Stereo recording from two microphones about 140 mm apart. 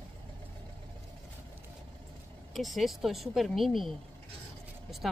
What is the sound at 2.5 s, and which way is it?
Speech, centre (ahead or behind).